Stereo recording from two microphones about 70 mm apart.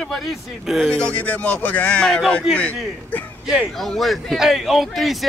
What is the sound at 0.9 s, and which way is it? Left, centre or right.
Speech, centre.